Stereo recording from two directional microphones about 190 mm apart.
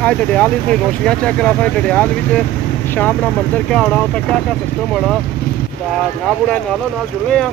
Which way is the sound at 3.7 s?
5° left (ahead or behind).